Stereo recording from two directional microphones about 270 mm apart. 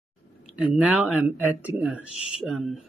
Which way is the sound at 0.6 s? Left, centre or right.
Centre.